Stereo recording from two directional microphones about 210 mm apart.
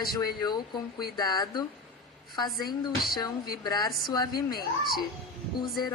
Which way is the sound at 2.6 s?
45° left (ahead or behind).